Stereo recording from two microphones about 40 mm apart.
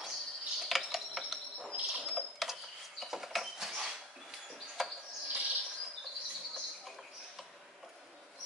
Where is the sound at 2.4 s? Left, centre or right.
Centre.